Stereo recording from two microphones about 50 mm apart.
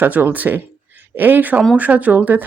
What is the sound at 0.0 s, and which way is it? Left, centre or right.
Speech, right.